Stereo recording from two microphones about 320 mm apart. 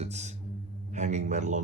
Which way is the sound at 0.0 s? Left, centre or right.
Right.